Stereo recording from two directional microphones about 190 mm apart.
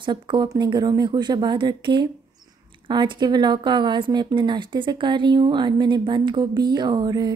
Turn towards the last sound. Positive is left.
turn(degrees=-20)  # may be behind; listen again after turning